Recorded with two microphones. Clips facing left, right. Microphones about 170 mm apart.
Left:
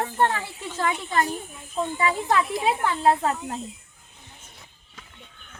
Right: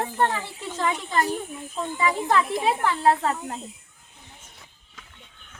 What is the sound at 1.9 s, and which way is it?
Speech, 15° left (ahead or behind).